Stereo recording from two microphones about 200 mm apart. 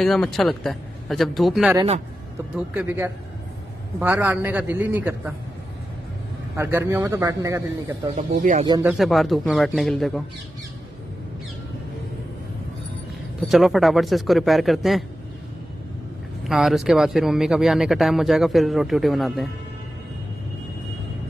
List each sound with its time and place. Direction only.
0.0 s a man's voice: centre (ahead or behind)
6.5 s a man's voice: 10° right (ahead or behind)
8.6 s speech: 20° right (ahead or behind)
8.9 s speech: centre (ahead or behind)
13.5 s speech: centre (ahead or behind)
16.4 s speech: centre (ahead or behind)